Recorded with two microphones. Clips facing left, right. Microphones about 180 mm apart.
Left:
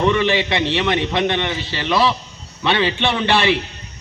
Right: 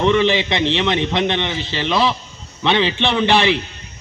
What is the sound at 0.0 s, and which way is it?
A man's voice, 15° right (ahead or behind).